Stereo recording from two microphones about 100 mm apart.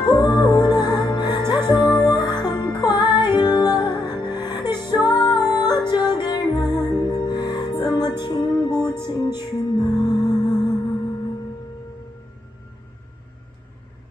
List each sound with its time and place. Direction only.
0.0 s music: 40° left (ahead or behind)